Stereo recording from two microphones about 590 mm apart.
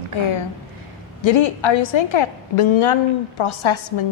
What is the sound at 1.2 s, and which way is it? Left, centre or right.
A woman's voice, left.